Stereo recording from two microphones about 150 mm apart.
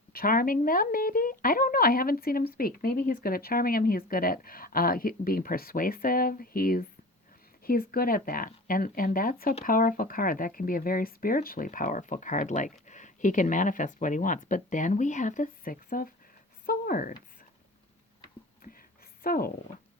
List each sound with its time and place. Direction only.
0.1 s speech: 75° left (ahead or behind)
19.2 s speech: 75° left (ahead or behind)